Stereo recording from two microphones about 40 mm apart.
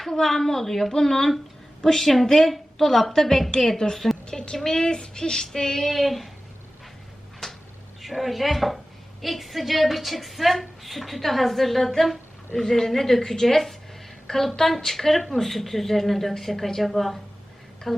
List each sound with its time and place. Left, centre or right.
0.0 s a woman's voice: centre
5.9 s a woman's voice: centre
8.0 s a woman's voice: centre